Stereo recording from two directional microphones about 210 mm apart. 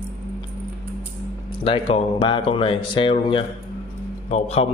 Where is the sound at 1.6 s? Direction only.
25° left (ahead or behind).